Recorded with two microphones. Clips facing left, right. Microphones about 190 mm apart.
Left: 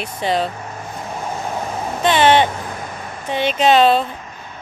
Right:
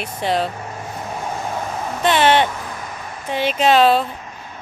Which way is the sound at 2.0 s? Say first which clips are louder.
Left 2 dB; centre (ahead or behind).